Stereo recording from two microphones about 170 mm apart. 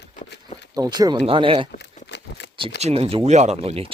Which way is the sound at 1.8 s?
90° left.